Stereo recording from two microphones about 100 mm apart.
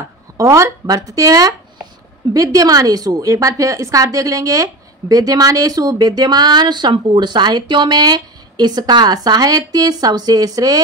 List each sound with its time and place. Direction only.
0.4 s a woman's voice: 30° right (ahead or behind)